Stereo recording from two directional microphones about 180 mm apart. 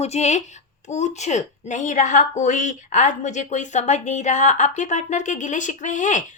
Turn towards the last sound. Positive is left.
turn(degrees=45)  # may be behind; listen again after turning